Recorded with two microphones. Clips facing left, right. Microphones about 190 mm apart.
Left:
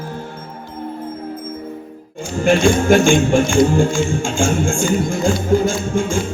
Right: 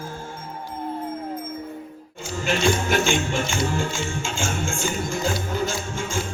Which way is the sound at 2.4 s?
50° left (ahead or behind).